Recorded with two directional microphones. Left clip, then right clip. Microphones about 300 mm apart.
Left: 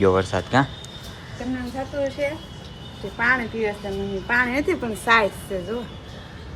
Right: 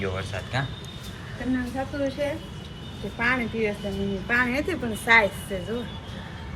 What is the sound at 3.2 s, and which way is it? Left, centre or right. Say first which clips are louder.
A woman's voice: left 4 dB; left.